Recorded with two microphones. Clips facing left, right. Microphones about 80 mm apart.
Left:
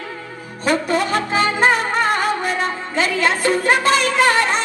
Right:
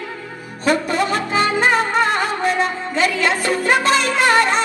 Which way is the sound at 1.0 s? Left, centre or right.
Right.